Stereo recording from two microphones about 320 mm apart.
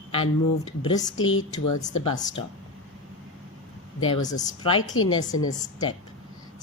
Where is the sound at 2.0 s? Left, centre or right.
Centre.